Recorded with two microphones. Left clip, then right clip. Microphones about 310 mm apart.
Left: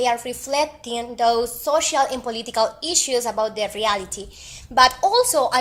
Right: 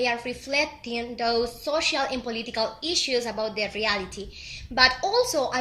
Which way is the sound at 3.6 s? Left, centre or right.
Left.